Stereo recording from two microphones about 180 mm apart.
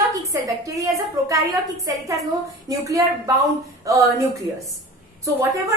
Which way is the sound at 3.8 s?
20° right (ahead or behind).